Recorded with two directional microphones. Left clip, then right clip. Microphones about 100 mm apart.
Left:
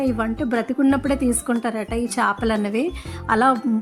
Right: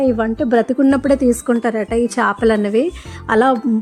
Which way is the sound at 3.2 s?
20° right (ahead or behind).